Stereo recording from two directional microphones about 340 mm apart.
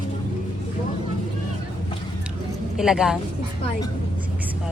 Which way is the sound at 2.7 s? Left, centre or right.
Centre.